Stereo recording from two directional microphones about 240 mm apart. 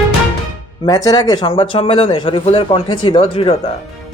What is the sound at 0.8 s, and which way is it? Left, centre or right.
Speech, centre.